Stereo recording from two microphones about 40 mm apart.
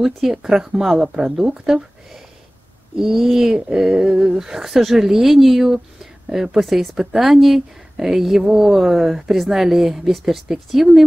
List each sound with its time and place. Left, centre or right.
0.0 s speech: centre